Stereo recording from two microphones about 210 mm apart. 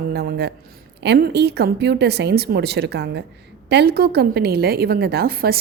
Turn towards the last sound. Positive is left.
turn(degrees=-45)  # may be behind; listen again after turning